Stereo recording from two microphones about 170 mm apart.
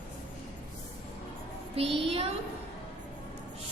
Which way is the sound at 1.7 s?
30° right (ahead or behind).